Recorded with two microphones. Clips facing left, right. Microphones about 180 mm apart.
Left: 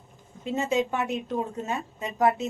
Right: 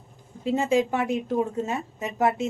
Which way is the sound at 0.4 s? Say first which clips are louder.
Right 4 dB; 30° right (ahead or behind).